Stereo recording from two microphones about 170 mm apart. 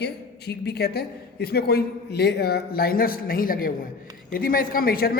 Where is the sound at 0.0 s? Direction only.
75° left (ahead or behind).